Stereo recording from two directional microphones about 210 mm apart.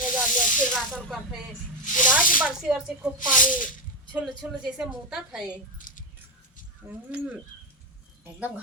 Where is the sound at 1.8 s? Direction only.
40° left (ahead or behind).